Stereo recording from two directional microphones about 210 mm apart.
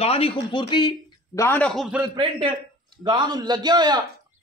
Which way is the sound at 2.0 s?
25° right (ahead or behind).